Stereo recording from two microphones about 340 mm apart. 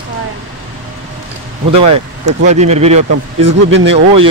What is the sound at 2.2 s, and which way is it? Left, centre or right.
Speech, right.